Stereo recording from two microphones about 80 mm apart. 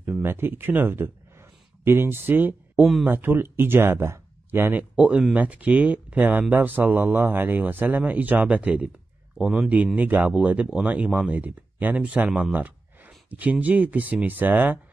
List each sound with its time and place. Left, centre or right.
0.0 s speech: right
2.8 s speech: centre
3.1 s speech: right
4.9 s a man's voice: centre
9.9 s speech: right